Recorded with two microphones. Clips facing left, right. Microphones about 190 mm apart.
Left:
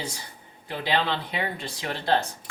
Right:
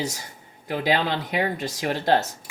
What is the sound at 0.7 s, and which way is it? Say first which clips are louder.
Speech: right 3 dB; 45° right (ahead or behind).